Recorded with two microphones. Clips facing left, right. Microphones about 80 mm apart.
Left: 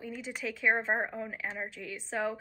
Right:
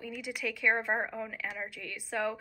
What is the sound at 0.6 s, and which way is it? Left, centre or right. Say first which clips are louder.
A woman's voice: left 1 dB; centre.